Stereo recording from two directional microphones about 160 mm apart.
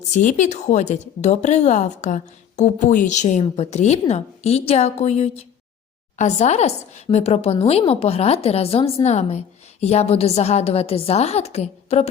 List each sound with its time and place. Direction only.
0.1 s a woman's voice: 50° left (ahead or behind)